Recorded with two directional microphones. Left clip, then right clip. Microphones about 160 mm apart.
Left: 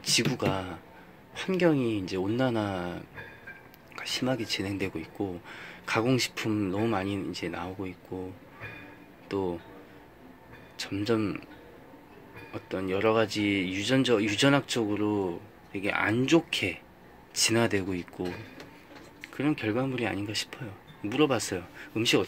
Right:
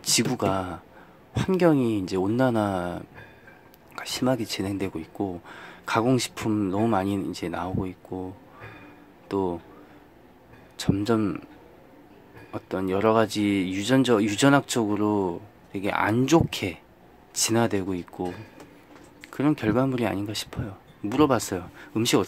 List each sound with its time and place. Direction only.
0.0 s speech: 25° right (ahead or behind)
9.3 s speech: 25° right (ahead or behind)
10.8 s speech: 25° right (ahead or behind)
12.5 s speech: 25° right (ahead or behind)
19.2 s speech: 30° right (ahead or behind)